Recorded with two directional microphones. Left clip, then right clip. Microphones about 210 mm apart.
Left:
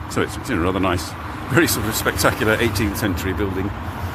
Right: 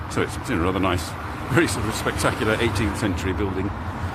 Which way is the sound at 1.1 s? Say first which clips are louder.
Left 1 dB; 50° right (ahead or behind).